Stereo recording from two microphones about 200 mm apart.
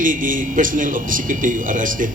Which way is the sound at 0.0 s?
40° right (ahead or behind).